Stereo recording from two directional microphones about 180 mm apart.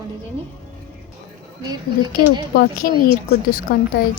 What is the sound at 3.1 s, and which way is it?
A woman's voice, 55° left (ahead or behind).